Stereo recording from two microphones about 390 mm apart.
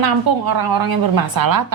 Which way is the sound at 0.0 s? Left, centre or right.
Right.